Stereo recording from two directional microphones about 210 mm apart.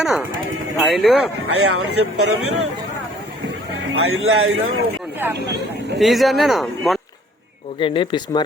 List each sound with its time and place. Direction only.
0.0 s speech: centre (ahead or behind)
1.5 s speech: 90° right
3.9 s a man's voice: 85° right
5.2 s speech: 10° right (ahead or behind)
7.8 s speech: 25° left (ahead or behind)